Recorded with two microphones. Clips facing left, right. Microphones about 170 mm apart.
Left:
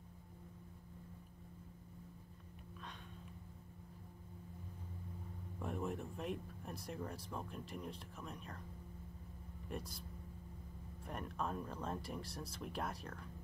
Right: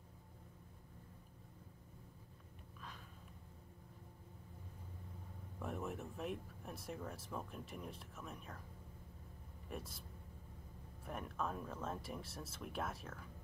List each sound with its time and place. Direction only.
5.6 s speech: centre (ahead or behind)
9.7 s speech: centre (ahead or behind)
11.1 s speech: centre (ahead or behind)